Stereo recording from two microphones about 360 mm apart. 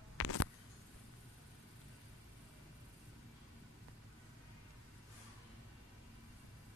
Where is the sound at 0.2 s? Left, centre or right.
Left.